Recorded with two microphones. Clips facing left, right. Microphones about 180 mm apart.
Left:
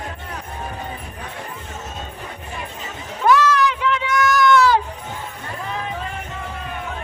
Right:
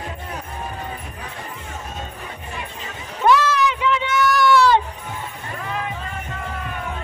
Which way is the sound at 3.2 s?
Centre (ahead or behind).